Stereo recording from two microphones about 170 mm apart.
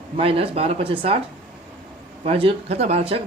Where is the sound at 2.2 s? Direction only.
35° right (ahead or behind).